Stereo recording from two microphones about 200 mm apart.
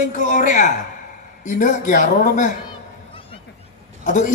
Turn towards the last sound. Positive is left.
turn(degrees=40)  # may be behind; listen again after turning